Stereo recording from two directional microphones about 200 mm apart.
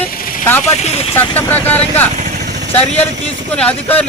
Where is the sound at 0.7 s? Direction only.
35° left (ahead or behind).